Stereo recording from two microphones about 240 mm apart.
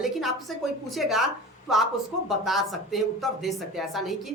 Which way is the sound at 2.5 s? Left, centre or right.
Centre.